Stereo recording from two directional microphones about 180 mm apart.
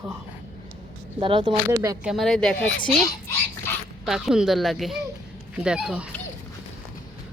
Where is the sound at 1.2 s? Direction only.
30° right (ahead or behind).